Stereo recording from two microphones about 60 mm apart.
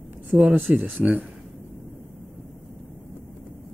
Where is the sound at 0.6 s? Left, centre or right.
Right.